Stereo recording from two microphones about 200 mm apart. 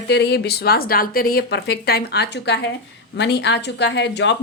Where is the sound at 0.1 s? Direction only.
55° left (ahead or behind).